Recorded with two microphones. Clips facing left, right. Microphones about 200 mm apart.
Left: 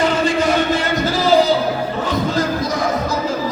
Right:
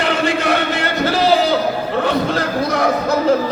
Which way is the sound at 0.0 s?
65° right (ahead or behind).